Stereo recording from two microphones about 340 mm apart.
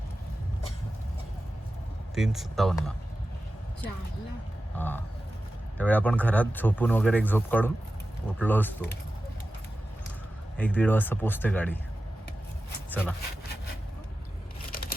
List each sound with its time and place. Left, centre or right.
2.1 s speech: centre
4.8 s speech: centre
10.6 s speech: centre
12.9 s speech: centre
14.7 s a sound: left